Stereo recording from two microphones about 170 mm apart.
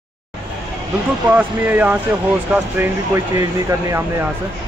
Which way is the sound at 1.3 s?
10° right (ahead or behind).